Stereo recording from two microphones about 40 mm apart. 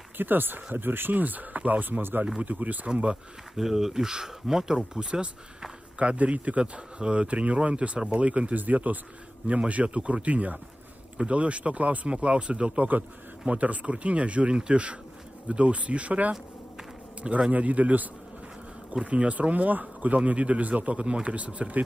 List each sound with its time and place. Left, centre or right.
0.2 s speech: right
1.2 s speech: right
2.4 s speech: right
3.5 s speech: centre
5.9 s speech: right
17.5 s speech: right